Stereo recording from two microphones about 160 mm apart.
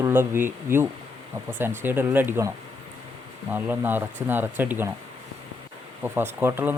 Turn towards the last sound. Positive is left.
turn(degrees=-15)  # may be behind; listen again after turning